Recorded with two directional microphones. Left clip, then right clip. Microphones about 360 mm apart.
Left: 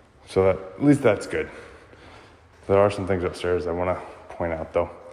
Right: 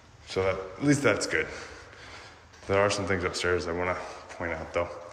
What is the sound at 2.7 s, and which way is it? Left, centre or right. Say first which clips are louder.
Speech: left 5 dB; centre.